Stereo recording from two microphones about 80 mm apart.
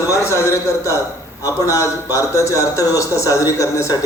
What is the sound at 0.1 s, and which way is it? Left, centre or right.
A man's voice, left.